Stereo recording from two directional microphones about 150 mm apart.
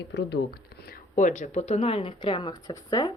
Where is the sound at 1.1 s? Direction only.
55° left (ahead or behind); by 3.1 s 25° left (ahead or behind).